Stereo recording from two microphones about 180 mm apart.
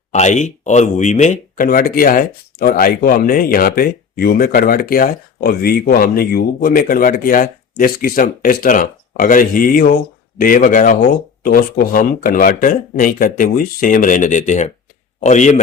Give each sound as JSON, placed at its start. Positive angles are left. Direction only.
{"t": 0.1, "sound": "speech", "side_deg": 40}